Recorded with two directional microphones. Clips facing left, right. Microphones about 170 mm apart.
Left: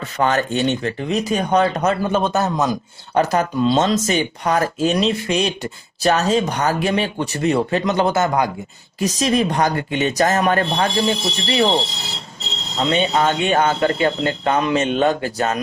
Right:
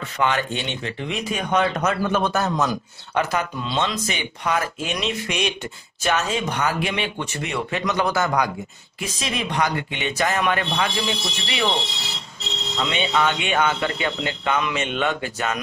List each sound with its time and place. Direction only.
0.2 s speech: 40° left (ahead or behind); by 2.5 s 20° left (ahead or behind)
3.2 s speech: 40° left (ahead or behind); by 8.5 s 25° left (ahead or behind)
9.0 s speech: 40° left (ahead or behind)